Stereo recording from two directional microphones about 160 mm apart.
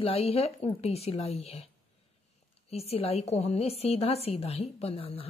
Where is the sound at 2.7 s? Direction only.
40° left (ahead or behind).